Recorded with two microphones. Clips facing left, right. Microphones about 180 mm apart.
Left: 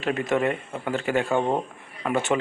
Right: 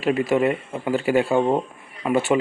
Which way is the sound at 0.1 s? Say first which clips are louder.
Right 4 dB; 15° right (ahead or behind).